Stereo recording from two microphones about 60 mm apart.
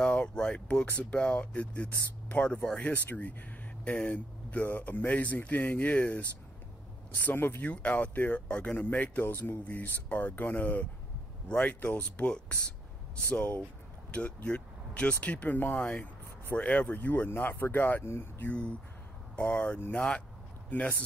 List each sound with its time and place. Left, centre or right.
0.0 s speech: centre
7.3 s speech: left
19.3 s speech: left
20.7 s speech: left